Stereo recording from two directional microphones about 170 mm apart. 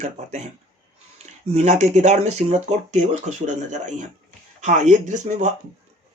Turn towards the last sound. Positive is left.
turn(degrees=-45)  # may be behind; listen again after turning